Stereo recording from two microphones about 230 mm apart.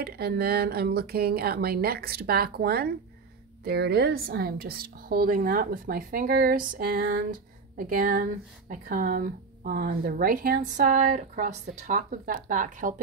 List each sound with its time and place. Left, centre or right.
0.0 s a woman's voice: right